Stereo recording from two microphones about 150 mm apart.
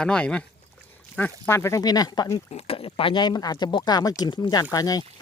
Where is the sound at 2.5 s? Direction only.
40° left (ahead or behind).